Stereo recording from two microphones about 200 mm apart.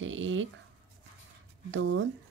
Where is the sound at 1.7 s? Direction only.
65° right (ahead or behind).